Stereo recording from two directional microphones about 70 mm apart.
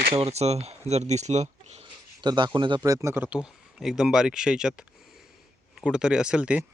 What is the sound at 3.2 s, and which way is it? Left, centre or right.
Speech, centre.